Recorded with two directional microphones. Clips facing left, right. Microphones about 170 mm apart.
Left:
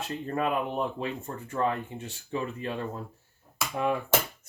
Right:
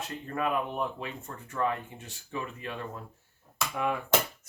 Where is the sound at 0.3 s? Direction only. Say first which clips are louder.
Left 2 dB; 30° left (ahead or behind).